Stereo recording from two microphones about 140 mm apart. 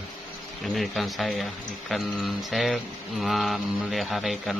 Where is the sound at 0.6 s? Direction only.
Centre (ahead or behind).